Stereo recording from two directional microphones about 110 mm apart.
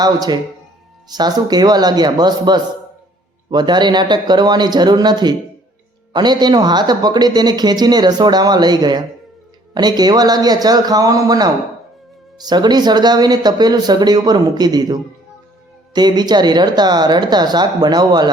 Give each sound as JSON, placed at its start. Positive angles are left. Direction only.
{"t": 0.0, "sound": "speech", "side_deg": -35}